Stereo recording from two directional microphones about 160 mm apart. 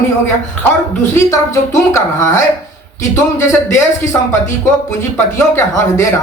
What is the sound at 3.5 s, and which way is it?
Speech, 20° left (ahead or behind).